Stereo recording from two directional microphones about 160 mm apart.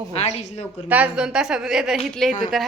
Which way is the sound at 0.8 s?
10° right (ahead or behind).